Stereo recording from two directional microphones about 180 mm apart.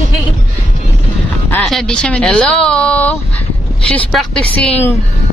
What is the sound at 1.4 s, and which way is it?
Speech, 5° left (ahead or behind).